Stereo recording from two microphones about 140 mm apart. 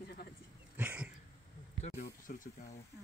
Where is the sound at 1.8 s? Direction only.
65° left (ahead or behind).